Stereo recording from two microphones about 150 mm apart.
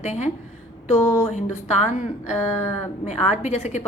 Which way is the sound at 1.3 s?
50° left (ahead or behind).